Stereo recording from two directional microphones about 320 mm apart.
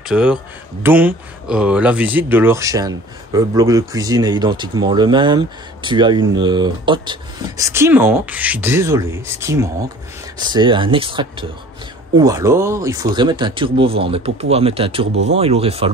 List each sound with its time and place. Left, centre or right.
0.0 s speech: centre